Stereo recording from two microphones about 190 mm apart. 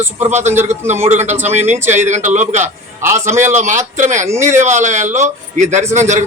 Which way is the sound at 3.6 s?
40° right (ahead or behind).